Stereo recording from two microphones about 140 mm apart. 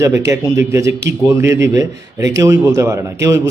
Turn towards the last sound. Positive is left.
turn(degrees=-20)  # may be behind; listen again after turning